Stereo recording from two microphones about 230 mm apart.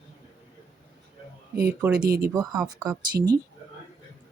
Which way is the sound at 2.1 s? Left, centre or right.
Right.